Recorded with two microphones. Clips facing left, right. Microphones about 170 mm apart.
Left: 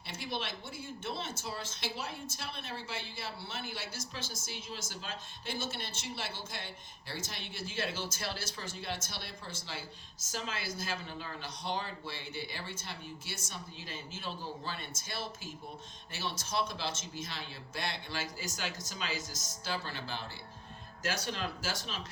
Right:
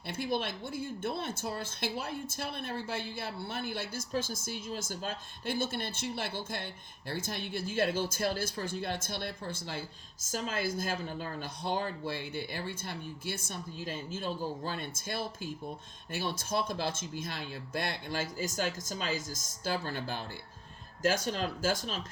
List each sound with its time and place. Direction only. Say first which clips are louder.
0.1 s speech: right 6 dB; 50° right (ahead or behind)